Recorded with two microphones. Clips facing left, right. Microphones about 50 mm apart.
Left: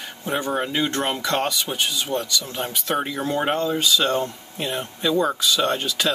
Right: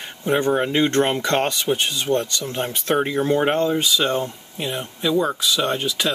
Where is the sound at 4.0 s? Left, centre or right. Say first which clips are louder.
Even; centre.